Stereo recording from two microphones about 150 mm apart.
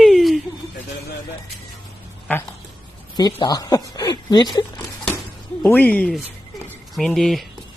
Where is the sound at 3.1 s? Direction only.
30° left (ahead or behind).